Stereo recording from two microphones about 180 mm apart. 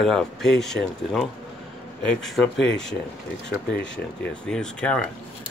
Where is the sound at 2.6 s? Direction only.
75° left (ahead or behind).